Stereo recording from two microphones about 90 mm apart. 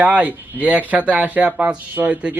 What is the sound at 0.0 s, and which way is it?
Speech, 15° right (ahead or behind).